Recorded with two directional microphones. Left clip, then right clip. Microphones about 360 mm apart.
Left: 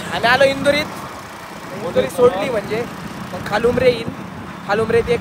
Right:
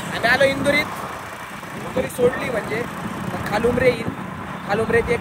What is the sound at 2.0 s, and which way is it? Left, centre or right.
Speech, centre.